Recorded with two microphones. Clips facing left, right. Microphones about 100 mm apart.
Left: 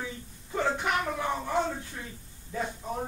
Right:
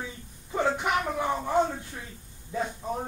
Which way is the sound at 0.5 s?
20° right (ahead or behind).